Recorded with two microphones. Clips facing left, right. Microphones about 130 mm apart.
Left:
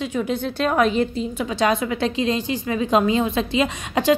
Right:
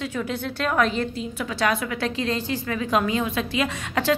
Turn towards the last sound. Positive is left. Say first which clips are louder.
# left 4 dB
turn(degrees=20)  # may be behind; listen again after turning